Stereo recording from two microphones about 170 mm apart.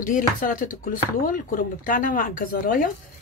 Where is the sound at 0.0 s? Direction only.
50° left (ahead or behind).